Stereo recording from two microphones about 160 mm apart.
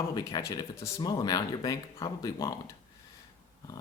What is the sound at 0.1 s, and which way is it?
Speech, 25° left (ahead or behind).